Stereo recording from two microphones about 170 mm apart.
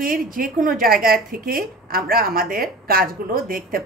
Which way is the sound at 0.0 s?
55° right (ahead or behind).